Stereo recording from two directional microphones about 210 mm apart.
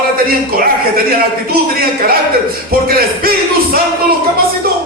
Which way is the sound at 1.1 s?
45° right (ahead or behind).